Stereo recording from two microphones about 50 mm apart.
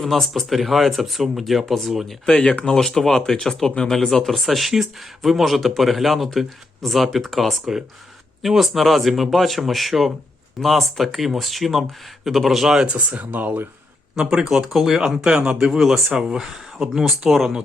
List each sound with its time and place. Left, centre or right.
0.0 s speech: centre
12.8 s speech: right
14.2 s speech: centre